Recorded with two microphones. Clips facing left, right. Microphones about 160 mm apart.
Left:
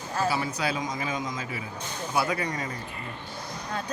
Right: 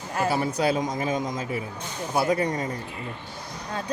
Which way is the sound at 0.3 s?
55° right (ahead or behind).